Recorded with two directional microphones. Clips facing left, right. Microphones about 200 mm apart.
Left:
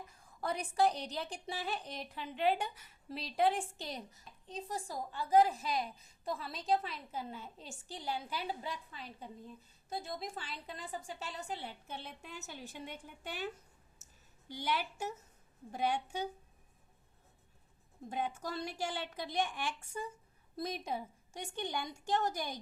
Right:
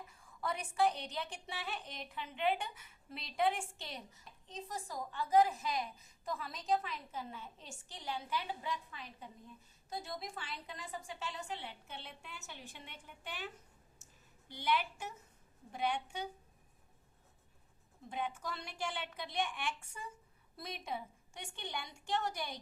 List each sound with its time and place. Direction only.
0.1 s a woman's voice: 40° left (ahead or behind)
14.0 s a sound: 40° left (ahead or behind)
15.7 s a woman's voice: 40° left (ahead or behind)
18.1 s a woman's voice: 40° left (ahead or behind)